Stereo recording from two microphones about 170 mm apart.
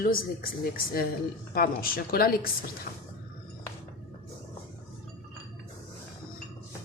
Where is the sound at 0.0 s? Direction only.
60° left (ahead or behind).